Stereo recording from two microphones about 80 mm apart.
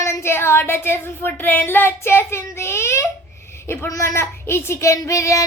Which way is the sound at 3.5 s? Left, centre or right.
Left.